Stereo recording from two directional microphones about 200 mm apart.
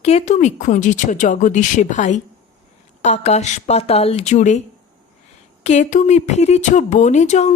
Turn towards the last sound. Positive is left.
turn(degrees=35)  # may be behind; listen again after turning